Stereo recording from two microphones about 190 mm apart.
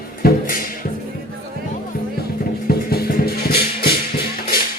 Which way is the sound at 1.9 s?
50° left (ahead or behind).